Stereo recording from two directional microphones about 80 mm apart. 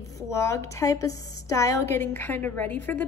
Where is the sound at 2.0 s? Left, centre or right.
Left.